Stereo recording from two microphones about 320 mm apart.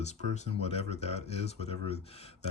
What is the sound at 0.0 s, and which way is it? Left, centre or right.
Speech, left.